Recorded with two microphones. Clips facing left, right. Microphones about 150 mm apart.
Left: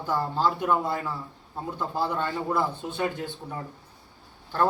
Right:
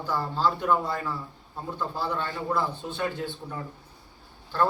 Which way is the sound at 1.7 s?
20° left (ahead or behind).